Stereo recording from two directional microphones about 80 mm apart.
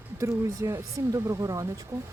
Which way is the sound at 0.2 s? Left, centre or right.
Right.